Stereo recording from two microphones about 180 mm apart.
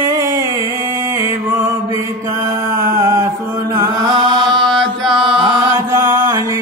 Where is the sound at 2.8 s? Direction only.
15° right (ahead or behind).